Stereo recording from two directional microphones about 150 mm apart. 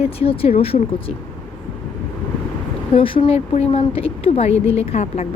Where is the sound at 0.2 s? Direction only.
40° left (ahead or behind).